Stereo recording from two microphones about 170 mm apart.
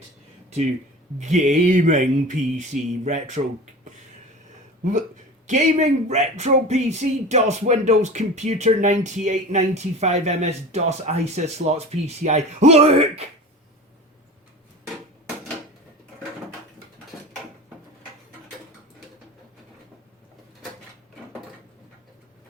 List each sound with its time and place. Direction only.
1.2 s speech: 45° right (ahead or behind)
4.9 s speech: 45° right (ahead or behind)